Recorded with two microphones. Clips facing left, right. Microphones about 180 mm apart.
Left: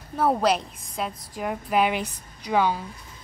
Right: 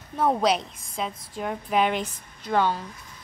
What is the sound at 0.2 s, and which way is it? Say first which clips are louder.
Speech: left 1 dB; 5° left (ahead or behind).